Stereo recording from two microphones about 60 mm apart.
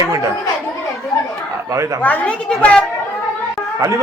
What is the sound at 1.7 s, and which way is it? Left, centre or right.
Speech, right.